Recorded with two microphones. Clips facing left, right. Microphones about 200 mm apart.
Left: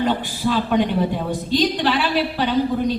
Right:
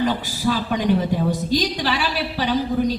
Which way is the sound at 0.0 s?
55° left (ahead or behind).